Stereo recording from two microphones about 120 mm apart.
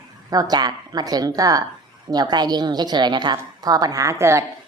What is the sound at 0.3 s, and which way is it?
A woman's voice, 30° right (ahead or behind).